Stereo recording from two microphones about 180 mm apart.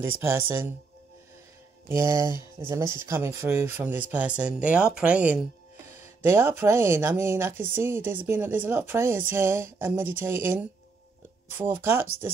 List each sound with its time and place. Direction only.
0.3 s speech: 10° right (ahead or behind)
1.9 s speech: 15° right (ahead or behind)